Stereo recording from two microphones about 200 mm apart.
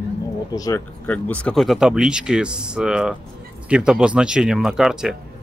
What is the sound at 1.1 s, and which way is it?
Speech, 5° left (ahead or behind).